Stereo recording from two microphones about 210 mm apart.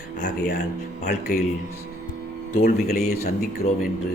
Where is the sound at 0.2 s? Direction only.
40° left (ahead or behind).